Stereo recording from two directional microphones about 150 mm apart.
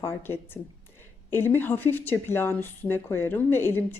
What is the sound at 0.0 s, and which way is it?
A woman's voice, 15° left (ahead or behind).